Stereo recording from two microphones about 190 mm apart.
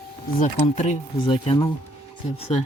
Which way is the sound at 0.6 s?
35° left (ahead or behind).